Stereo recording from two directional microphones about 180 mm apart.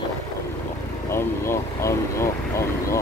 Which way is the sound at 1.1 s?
15° left (ahead or behind).